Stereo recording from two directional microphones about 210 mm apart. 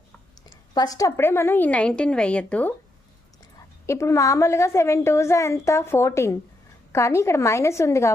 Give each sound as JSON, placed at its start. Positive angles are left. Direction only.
{"t": 0.7, "sound": "a woman's voice", "side_deg": 20}
{"t": 3.8, "sound": "a woman's voice", "side_deg": 15}